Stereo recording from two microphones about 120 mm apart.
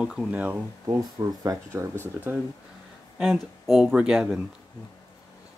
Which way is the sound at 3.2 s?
Centre (ahead or behind).